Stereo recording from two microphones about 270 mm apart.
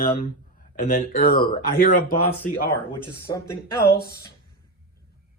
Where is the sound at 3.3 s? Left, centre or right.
Centre.